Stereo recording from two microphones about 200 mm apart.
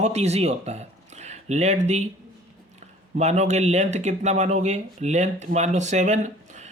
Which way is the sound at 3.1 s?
35° right (ahead or behind).